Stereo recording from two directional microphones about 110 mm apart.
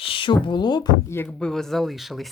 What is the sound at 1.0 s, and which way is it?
Speech, 20° left (ahead or behind).